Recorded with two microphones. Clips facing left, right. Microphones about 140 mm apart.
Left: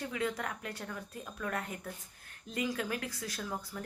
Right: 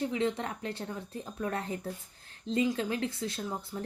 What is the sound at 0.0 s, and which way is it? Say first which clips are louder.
Speech: right 5 dB; 25° right (ahead or behind).